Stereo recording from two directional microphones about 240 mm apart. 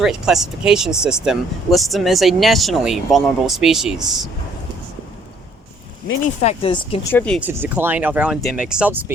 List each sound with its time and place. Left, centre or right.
0.0 s speech: centre
6.4 s speech: left
7.1 s speech: centre
7.4 s speech: centre